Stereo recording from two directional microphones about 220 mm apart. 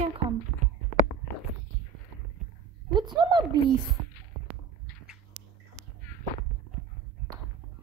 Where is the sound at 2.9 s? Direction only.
20° right (ahead or behind).